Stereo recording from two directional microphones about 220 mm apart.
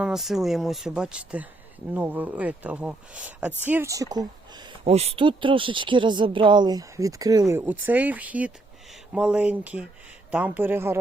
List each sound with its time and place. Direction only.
0.0 s speech: centre (ahead or behind)
4.9 s speech: 30° right (ahead or behind); by 10.9 s 10° right (ahead or behind)